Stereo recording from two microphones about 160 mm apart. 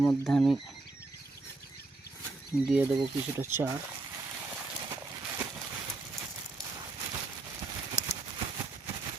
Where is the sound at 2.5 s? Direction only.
20° left (ahead or behind).